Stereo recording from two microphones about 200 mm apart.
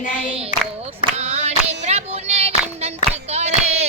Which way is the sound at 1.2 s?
35° right (ahead or behind).